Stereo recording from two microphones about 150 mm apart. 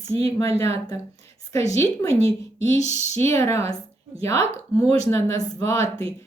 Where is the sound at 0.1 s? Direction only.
40° right (ahead or behind).